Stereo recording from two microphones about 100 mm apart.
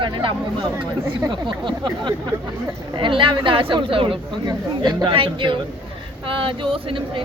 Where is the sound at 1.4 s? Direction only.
50° right (ahead or behind).